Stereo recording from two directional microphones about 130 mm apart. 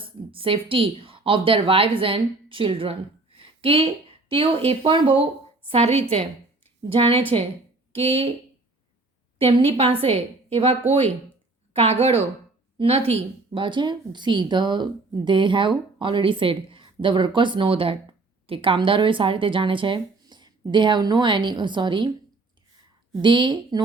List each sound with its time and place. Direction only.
0.0 s a woman's voice: 45° right (ahead or behind)
9.4 s a woman's voice: 45° right (ahead or behind)
23.2 s a woman's voice: 35° right (ahead or behind)